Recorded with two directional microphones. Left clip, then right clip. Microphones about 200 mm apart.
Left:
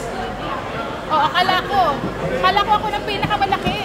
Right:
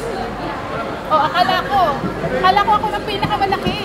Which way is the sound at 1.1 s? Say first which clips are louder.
Right 1 dB; 20° left (ahead or behind).